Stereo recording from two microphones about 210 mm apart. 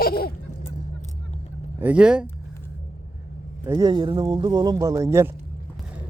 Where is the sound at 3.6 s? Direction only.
15° right (ahead or behind).